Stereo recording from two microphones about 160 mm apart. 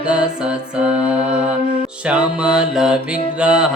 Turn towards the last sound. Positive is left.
turn(degrees=-5)  # may be behind; listen again after turning